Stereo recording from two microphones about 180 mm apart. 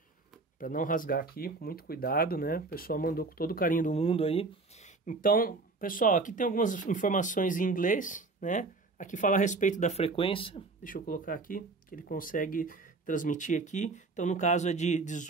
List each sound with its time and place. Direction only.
0.6 s speech: 50° left (ahead or behind)
4.0 s speech: 30° left (ahead or behind)
5.0 s speech: 50° left (ahead or behind); by 10.6 s 30° left (ahead or behind)
10.8 s speech: 50° left (ahead or behind)